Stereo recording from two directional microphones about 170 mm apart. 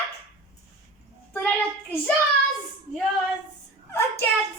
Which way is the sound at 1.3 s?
10° left (ahead or behind).